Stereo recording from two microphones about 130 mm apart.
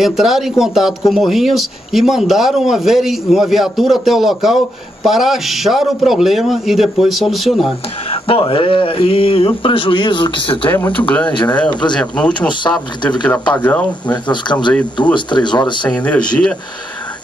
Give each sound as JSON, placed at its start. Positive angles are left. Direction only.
{"t": 0.0, "sound": "speech", "side_deg": 0}
{"t": 8.3, "sound": "speech", "side_deg": 45}
{"t": 10.7, "sound": "speech", "side_deg": 15}
{"t": 11.7, "sound": "speech", "side_deg": 35}
{"t": 12.0, "sound": "speech", "side_deg": 10}
{"t": 12.4, "sound": "speech", "side_deg": 35}
{"t": 13.6, "sound": "speech", "side_deg": 10}
{"t": 14.1, "sound": "speech", "side_deg": 35}
{"t": 15.9, "sound": "speech", "side_deg": 10}